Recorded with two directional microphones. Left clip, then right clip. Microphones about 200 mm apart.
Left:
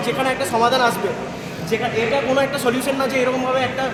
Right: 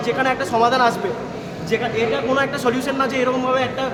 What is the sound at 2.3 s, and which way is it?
Speech, centre (ahead or behind).